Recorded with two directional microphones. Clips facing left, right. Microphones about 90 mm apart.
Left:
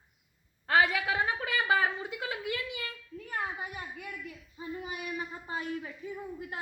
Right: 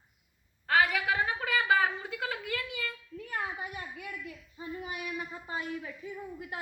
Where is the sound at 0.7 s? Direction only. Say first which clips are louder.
Even; 30° left (ahead or behind).